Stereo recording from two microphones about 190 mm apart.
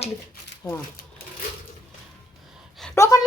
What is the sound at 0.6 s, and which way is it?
Speech, 15° left (ahead or behind).